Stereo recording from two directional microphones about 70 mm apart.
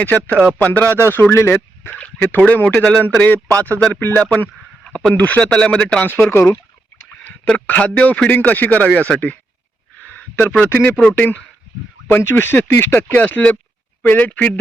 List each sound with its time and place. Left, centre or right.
0.0 s speech: left
1.3 s speech: left
2.0 s speech: centre
4.8 s a sound: centre
5.2 s speech: centre
6.3 s speech: left
7.7 s speech: left
10.0 s a sound: left
10.4 s speech: left